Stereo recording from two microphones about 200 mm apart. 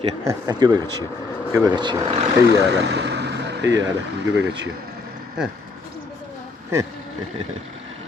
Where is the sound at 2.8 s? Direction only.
60° right (ahead or behind).